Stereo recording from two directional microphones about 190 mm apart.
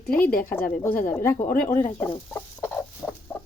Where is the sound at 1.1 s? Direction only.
15° left (ahead or behind).